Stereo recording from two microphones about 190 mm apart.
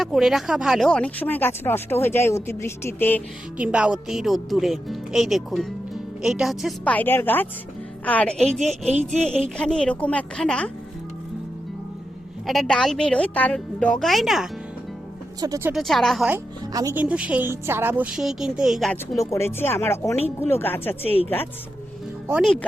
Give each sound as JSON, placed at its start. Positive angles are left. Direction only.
{"t": 0.0, "sound": "speech", "side_deg": 0}
{"t": 3.6, "sound": "speech", "side_deg": -5}
{"t": 12.5, "sound": "speech", "side_deg": 0}
{"t": 15.4, "sound": "a woman's voice", "side_deg": -15}
{"t": 15.7, "sound": "a woman's voice", "side_deg": 0}
{"t": 19.3, "sound": "speech", "side_deg": 15}